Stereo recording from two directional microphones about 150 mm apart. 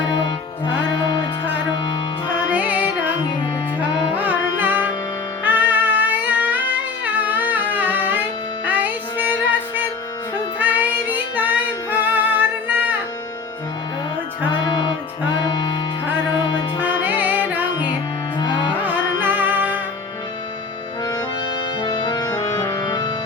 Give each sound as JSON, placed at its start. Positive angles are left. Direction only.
{"t": 0.3, "sound": "music", "side_deg": 30}
{"t": 2.5, "sound": "music", "side_deg": -10}
{"t": 7.0, "sound": "humming", "side_deg": -10}
{"t": 8.6, "sound": "music", "side_deg": -10}
{"t": 10.6, "sound": "music", "side_deg": -10}
{"t": 16.8, "sound": "music", "side_deg": -10}
{"t": 18.3, "sound": "music", "side_deg": 30}
{"t": 18.8, "sound": "carnatic music", "side_deg": -10}
{"t": 21.0, "sound": "accordion", "side_deg": 25}
{"t": 22.6, "sound": "music", "side_deg": 20}